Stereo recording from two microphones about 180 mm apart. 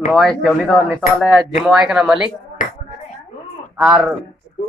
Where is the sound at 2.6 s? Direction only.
50° left (ahead or behind).